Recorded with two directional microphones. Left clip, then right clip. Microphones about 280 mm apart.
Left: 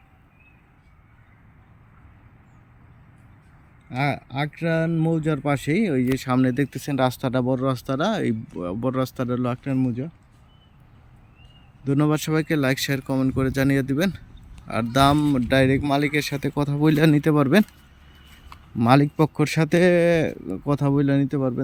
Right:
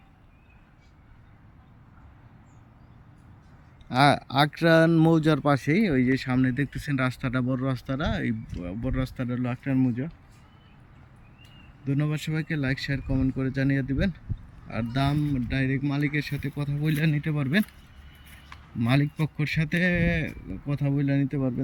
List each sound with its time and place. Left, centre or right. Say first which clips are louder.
3.8 s speech: right 5 dB; centre
11.9 s speech: left 9 dB; centre
18.8 s speech: left 9 dB; centre